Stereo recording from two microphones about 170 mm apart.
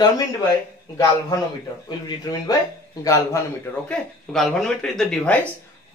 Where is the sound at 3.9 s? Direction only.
5° left (ahead or behind).